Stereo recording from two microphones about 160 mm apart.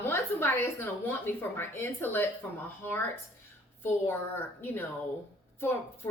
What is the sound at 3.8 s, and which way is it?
A woman's voice, 15° left (ahead or behind).